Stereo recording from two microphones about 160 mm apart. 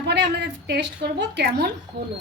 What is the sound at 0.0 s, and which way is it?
A woman's voice, 90° right.